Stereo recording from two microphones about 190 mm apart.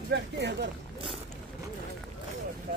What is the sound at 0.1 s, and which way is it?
Speech, 65° right (ahead or behind).